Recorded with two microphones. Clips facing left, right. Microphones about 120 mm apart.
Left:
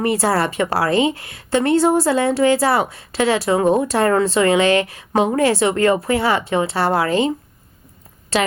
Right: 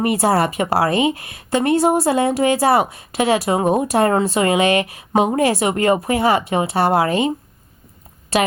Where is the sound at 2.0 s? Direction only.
25° right (ahead or behind).